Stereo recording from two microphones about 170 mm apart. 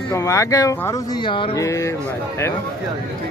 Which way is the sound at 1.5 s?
20° left (ahead or behind).